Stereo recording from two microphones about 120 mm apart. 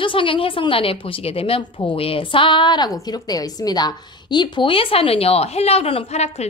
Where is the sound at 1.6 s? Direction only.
40° left (ahead or behind).